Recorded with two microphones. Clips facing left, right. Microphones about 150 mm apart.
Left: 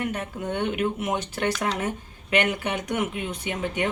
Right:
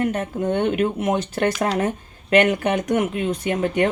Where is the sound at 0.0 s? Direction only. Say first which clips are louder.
Right 7 dB; 40° right (ahead or behind).